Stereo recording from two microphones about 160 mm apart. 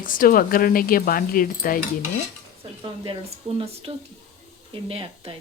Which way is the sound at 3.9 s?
35° right (ahead or behind).